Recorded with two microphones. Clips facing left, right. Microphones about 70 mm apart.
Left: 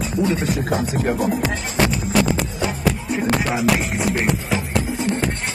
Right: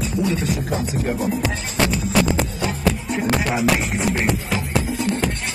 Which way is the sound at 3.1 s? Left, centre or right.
Centre.